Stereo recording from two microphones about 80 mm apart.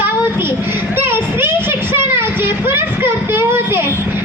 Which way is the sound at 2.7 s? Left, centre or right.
Right.